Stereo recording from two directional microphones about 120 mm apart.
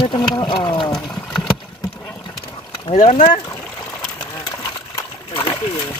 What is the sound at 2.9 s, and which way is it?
Speech, 60° left (ahead or behind).